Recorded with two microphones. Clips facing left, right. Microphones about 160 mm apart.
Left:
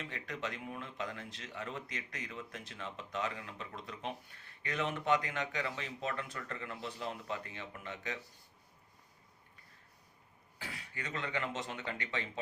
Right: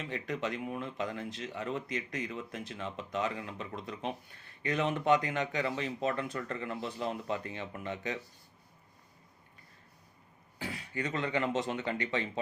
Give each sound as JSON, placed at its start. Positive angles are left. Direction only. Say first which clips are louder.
{"t": 0.1, "sound": "speech", "louder": "right 6 dB", "side_deg": -20}
{"t": 10.7, "sound": "speech", "louder": "right 8 dB", "side_deg": -25}